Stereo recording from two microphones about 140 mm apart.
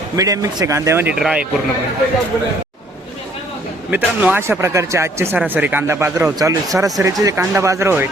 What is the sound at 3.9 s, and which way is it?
Speech, 10° right (ahead or behind).